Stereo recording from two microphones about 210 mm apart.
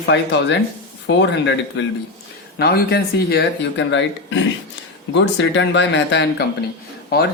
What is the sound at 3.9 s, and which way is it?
Speech, 60° left (ahead or behind).